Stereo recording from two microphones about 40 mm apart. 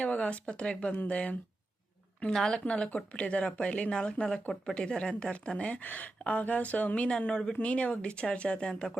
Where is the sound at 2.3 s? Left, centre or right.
Centre.